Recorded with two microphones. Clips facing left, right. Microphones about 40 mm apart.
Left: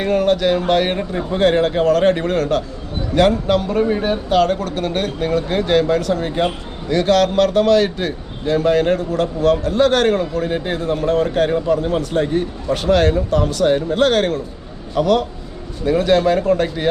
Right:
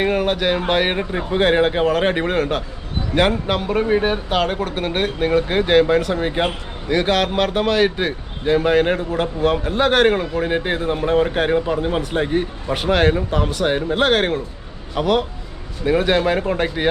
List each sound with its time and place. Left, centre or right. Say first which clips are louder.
0.0 s speech: left 3 dB; centre